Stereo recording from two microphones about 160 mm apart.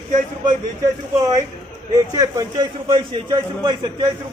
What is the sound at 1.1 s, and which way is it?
A man's voice, 20° right (ahead or behind).